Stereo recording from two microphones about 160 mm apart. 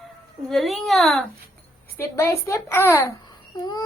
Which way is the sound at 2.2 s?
15° left (ahead or behind).